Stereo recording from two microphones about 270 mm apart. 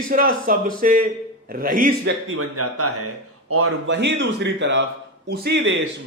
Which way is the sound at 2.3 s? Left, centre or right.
Right.